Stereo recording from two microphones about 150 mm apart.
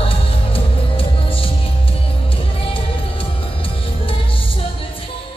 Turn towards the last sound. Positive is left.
turn(degrees=35)  # may be behind; listen again after turning